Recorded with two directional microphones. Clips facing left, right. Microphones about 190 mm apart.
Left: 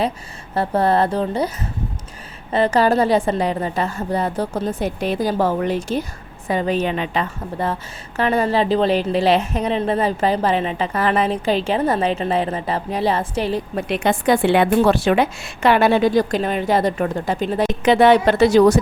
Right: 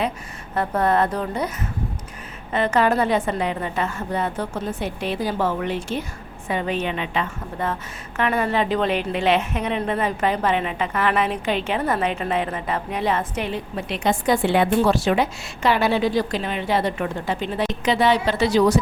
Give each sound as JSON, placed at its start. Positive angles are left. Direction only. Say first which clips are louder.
{"t": 0.5, "sound": "a woman's voice", "louder": "left 3 dB", "side_deg": 30}
{"t": 2.5, "sound": "a woman's voice", "louder": "left 3 dB", "side_deg": 35}
{"t": 13.7, "sound": "a woman's voice", "louder": "left 1 dB", "side_deg": 55}